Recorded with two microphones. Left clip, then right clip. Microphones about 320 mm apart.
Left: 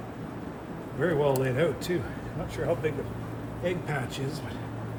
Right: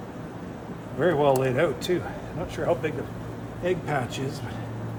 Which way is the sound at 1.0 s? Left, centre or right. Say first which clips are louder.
Right 4 dB; centre.